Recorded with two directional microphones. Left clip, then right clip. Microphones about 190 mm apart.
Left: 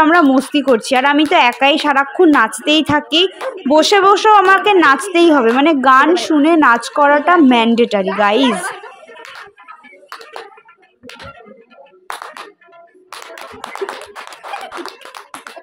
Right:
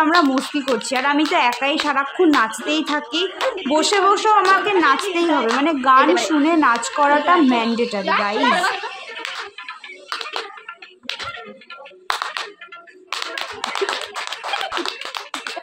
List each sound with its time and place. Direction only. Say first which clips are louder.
0.0 s a woman's voice: left 6 dB; 35° left (ahead or behind)
8.5 s speech: right 1 dB; centre (ahead or behind)